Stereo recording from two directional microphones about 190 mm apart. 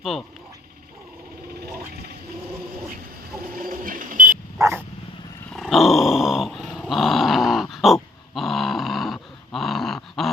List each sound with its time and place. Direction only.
0.0 s speech: centre (ahead or behind)
3.5 s a sound: 45° right (ahead or behind)
4.5 s dog: 15° right (ahead or behind)
5.5 s growling: centre (ahead or behind)
8.4 s dog: centre (ahead or behind)